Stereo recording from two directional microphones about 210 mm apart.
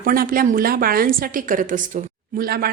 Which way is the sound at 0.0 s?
45° right (ahead or behind).